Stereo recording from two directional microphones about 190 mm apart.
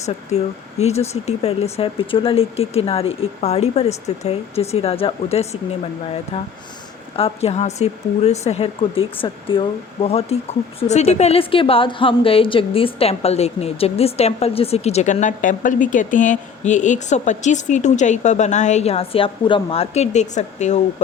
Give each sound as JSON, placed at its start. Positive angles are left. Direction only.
{"t": 0.0, "sound": "a woman's voice", "side_deg": 35}